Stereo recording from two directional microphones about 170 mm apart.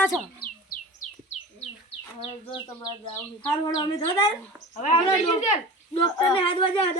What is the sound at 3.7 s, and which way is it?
Speech, 25° left (ahead or behind).